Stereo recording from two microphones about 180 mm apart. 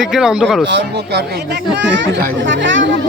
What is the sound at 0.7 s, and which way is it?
A child's voice, 70° right (ahead or behind).